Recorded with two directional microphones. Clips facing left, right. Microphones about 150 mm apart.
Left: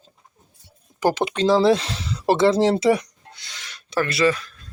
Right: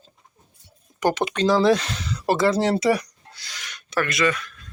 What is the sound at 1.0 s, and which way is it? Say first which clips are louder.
Speech: left 1 dB; 25° left (ahead or behind).